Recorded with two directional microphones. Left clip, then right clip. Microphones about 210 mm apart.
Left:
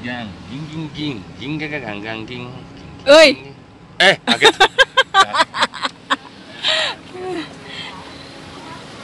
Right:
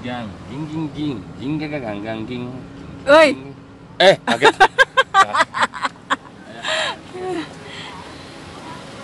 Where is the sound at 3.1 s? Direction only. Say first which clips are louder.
Left 3 dB; 15° left (ahead or behind).